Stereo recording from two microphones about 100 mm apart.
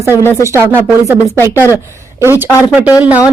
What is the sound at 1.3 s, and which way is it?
A woman's voice, 30° right (ahead or behind).